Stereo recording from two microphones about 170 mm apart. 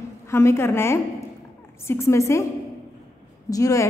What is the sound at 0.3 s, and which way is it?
A woman's voice, 15° left (ahead or behind).